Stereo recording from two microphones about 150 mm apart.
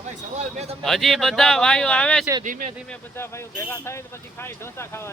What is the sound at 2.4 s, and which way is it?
Speech, 60° right (ahead or behind).